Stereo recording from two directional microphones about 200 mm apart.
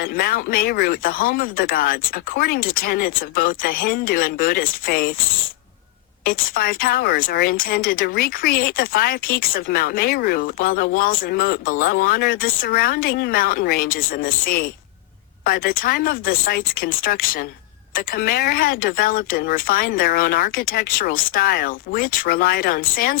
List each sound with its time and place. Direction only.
0.0 s speech: 50° left (ahead or behind)
6.2 s speech: 45° left (ahead or behind)